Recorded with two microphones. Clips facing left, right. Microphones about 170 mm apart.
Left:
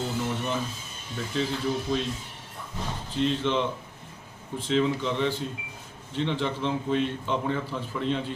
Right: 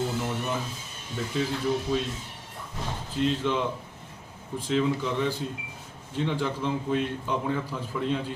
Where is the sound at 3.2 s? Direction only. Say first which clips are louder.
Even; 10° right (ahead or behind).